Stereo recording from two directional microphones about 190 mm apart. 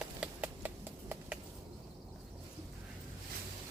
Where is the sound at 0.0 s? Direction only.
5° right (ahead or behind).